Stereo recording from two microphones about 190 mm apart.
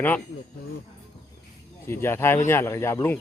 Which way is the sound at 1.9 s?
10° left (ahead or behind).